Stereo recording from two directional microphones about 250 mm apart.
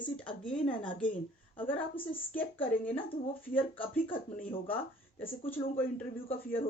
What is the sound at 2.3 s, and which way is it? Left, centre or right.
Speech, centre.